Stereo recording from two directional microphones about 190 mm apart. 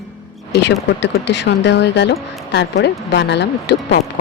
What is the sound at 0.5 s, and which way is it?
Speech, 65° left (ahead or behind).